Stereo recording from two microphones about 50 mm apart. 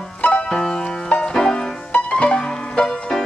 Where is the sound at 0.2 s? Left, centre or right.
Left.